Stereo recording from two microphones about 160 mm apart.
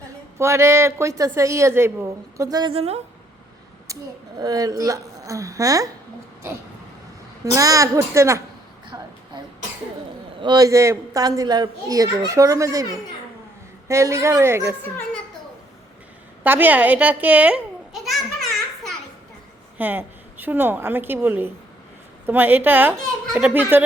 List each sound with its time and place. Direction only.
0.3 s a woman's voice: 15° right (ahead or behind)
2.7 s speech: 40° right (ahead or behind)
3.9 s a sound: 20° right (ahead or behind)
4.4 s a child's voice: 25° right (ahead or behind)
7.5 s a child's voice: 20° right (ahead or behind)
10.4 s a child's voice: 25° right (ahead or behind)
13.8 s a woman's voice: 20° right (ahead or behind)
16.4 s a child's voice: 10° right (ahead or behind)
19.8 s a woman's voice: 10° right (ahead or behind)